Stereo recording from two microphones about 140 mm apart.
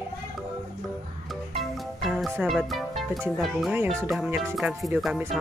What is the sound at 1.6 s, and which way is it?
Music, centre (ahead or behind).